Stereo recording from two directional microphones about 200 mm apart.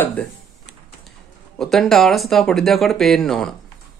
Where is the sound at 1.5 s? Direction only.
Centre (ahead or behind).